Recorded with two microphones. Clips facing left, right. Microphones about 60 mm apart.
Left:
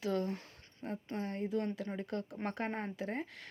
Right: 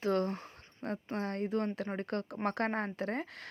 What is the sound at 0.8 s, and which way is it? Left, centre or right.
Speech, right.